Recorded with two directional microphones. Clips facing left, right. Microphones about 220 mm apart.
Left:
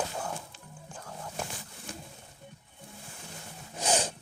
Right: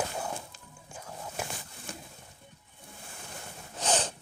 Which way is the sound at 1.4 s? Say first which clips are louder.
Right 1 dB; 5° right (ahead or behind).